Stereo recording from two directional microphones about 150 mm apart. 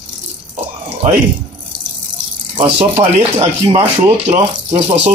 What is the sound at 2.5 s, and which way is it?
Speech, 35° right (ahead or behind).